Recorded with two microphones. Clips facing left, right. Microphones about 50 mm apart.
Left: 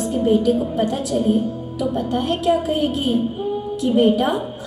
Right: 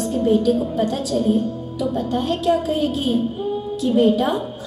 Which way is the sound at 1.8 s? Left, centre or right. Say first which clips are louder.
Even; left.